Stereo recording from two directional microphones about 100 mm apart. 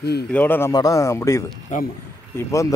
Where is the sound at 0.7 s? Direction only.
35° left (ahead or behind).